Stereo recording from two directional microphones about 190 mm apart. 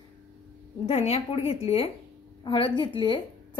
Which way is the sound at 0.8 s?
35° left (ahead or behind).